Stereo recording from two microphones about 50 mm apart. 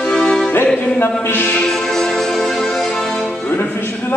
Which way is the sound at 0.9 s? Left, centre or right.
Left.